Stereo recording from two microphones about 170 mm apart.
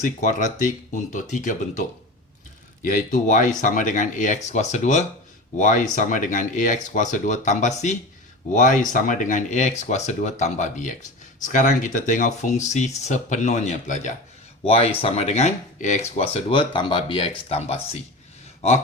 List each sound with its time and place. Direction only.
0.0 s speech: 50° left (ahead or behind)
14.6 s speech: 35° left (ahead or behind)